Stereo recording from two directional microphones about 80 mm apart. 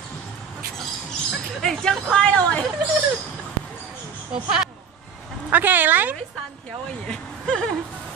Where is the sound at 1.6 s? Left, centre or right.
Centre.